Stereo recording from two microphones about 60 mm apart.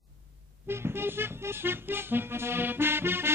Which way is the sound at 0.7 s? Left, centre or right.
Right.